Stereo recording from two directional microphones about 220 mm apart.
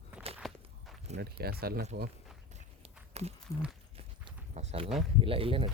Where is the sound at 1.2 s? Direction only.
45° right (ahead or behind).